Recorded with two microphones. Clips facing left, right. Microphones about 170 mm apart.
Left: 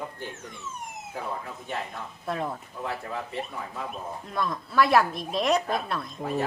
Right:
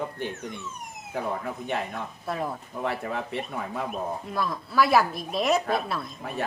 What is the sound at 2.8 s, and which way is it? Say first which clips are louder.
Speech: right 4 dB; 65° right (ahead or behind).